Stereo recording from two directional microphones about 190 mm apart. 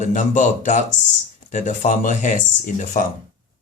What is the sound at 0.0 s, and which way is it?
Speech, 40° left (ahead or behind).